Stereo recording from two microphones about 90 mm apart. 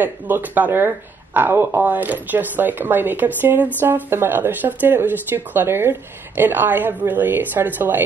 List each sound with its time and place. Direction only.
0.0 s speech: 20° right (ahead or behind)